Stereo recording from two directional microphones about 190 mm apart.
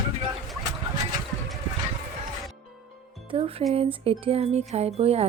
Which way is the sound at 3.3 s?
30° right (ahead or behind).